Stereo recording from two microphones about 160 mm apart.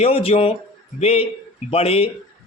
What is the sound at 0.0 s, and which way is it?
Speech, 35° left (ahead or behind).